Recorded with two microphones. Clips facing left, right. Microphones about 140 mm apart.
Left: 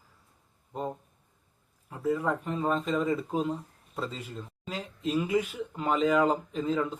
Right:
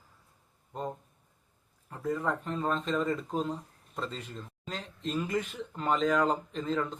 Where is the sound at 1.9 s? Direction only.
5° left (ahead or behind).